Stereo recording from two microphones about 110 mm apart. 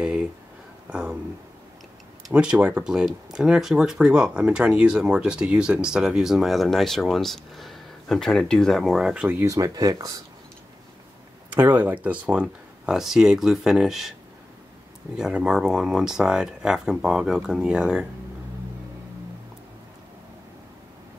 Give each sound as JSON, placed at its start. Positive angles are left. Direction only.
{"t": 2.3, "sound": "speech", "side_deg": -10}
{"t": 9.4, "sound": "speech", "side_deg": -30}
{"t": 11.5, "sound": "speech", "side_deg": -15}
{"t": 15.1, "sound": "speech", "side_deg": -5}